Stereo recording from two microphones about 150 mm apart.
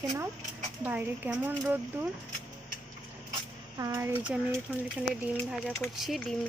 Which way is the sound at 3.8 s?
20° right (ahead or behind).